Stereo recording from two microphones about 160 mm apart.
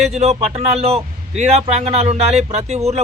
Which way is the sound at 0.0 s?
40° right (ahead or behind).